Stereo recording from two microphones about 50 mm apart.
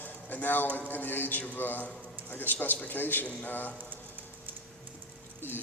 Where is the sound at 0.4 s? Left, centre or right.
Left.